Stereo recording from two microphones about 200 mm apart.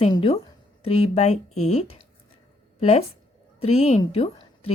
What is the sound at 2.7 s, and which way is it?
A woman's voice, 30° left (ahead or behind).